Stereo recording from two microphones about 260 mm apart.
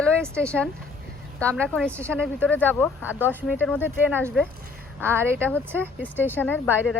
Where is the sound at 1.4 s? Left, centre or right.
Centre.